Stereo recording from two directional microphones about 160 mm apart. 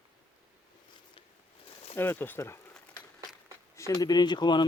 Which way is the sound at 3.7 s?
20° left (ahead or behind).